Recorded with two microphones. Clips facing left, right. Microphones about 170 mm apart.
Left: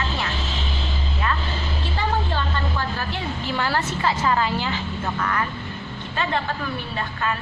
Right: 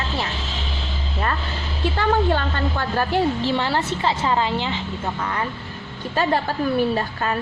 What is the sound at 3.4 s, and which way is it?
A woman's voice, 25° right (ahead or behind).